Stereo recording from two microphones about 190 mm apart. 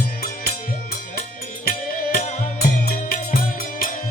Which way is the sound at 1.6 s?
55° left (ahead or behind).